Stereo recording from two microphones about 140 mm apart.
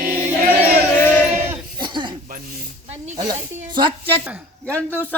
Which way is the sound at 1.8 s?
35° right (ahead or behind).